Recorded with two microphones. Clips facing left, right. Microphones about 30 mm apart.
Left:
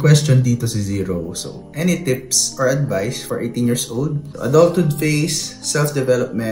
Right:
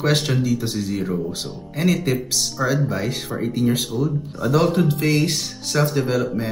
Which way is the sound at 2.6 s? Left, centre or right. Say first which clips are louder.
Left 4 dB; right.